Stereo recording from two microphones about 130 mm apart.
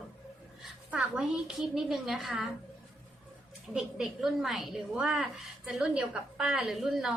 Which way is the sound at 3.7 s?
5° right (ahead or behind).